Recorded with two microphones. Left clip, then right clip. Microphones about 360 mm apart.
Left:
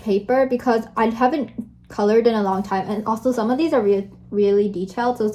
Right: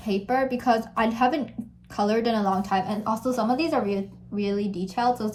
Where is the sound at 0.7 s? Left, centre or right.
Centre.